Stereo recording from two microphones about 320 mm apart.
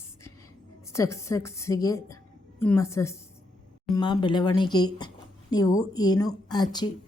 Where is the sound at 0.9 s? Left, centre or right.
Centre.